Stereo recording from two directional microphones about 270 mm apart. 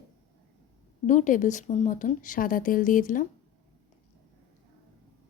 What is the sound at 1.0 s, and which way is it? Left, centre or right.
Speech, left.